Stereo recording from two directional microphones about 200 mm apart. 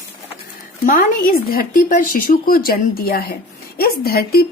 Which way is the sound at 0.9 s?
45° left (ahead or behind).